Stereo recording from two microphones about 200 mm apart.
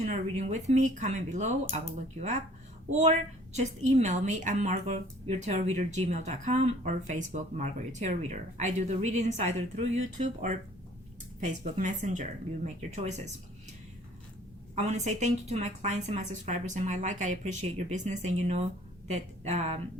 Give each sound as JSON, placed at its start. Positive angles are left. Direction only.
{"t": 0.0, "sound": "a woman's voice", "side_deg": -35}
{"t": 2.9, "sound": "a woman's voice", "side_deg": -35}
{"t": 14.8, "sound": "a woman's voice", "side_deg": -35}